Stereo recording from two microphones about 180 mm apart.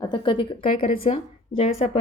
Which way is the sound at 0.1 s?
25° left (ahead or behind).